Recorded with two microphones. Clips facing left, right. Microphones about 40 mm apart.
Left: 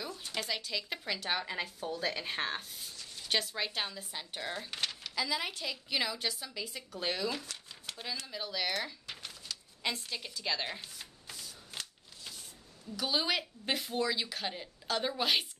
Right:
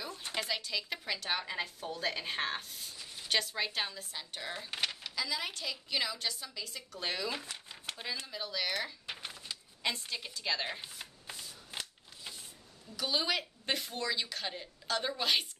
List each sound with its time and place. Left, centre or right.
0.5 s a woman's voice: centre
4.6 s a sound: centre
5.1 s a woman's voice: centre
7.0 s speech: centre
7.2 s speech: centre
8.3 s speech: centre
9.0 s a sound: right
9.8 s speech: centre
10.8 s shuffling cards: right
12.9 s speech: centre